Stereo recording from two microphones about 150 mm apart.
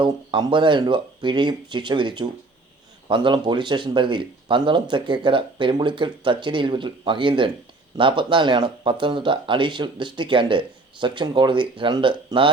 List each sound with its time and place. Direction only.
0.0 s speech: 30° right (ahead or behind)